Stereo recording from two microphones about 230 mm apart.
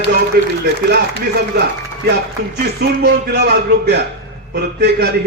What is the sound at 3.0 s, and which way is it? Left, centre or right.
A man's voice, right.